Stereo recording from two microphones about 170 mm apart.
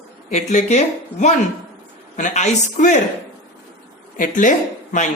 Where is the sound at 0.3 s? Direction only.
45° left (ahead or behind).